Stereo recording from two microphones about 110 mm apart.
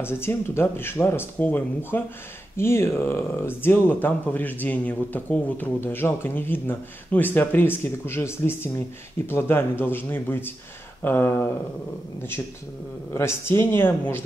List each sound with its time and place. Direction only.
0.0 s speech: 20° left (ahead or behind)
13.1 s speech: 25° left (ahead or behind)